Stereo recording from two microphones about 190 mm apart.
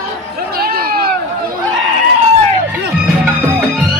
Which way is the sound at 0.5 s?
50° right (ahead or behind).